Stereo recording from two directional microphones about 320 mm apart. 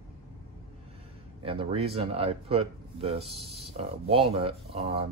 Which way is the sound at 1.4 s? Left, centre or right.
Centre.